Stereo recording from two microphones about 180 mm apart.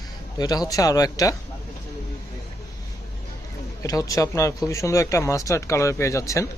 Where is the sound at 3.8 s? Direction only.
20° left (ahead or behind).